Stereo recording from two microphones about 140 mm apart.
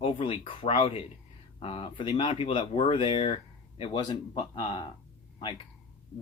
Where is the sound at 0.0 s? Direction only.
40° left (ahead or behind).